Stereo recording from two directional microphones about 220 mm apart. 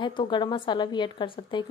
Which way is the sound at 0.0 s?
20° left (ahead or behind).